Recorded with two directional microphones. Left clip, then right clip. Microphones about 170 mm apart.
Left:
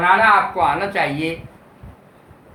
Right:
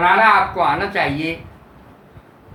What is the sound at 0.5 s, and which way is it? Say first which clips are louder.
Speech: even; 20° left (ahead or behind).